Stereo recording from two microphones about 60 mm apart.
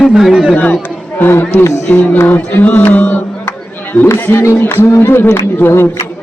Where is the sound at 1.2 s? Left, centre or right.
Left.